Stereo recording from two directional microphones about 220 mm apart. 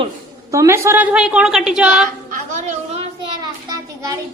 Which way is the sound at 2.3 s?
35° right (ahead or behind).